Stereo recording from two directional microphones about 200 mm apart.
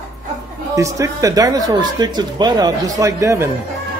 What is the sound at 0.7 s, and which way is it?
Speech, 15° right (ahead or behind).